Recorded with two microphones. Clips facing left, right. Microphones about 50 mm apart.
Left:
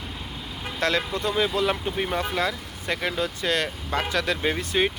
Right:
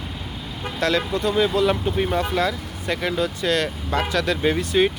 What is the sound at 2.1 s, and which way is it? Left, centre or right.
Speech, left.